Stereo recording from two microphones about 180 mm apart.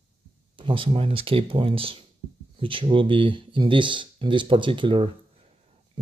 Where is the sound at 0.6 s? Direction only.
30° right (ahead or behind).